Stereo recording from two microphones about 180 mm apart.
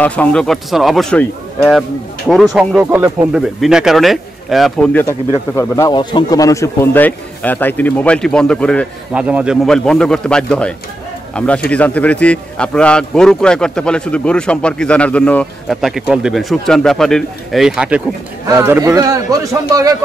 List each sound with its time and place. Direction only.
0.0 s a man's voice: 10° left (ahead or behind)
9.1 s a man's voice: 5° right (ahead or behind)